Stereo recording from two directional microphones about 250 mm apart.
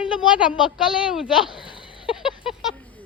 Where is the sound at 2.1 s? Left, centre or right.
Centre.